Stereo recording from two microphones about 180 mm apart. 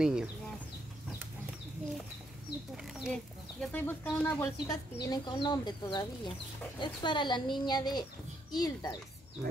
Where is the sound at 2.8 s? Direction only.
Centre (ahead or behind); by 9.0 s 20° left (ahead or behind).